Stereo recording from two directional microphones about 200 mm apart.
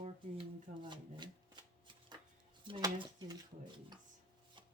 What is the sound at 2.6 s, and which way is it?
Speech, 25° right (ahead or behind).